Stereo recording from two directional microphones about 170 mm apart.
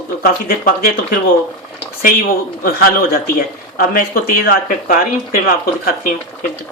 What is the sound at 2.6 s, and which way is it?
Speech, 60° left (ahead or behind).